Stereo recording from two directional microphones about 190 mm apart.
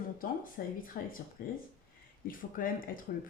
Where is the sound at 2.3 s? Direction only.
45° left (ahead or behind).